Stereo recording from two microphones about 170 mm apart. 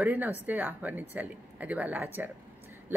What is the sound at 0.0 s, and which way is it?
A woman's voice, 10° right (ahead or behind).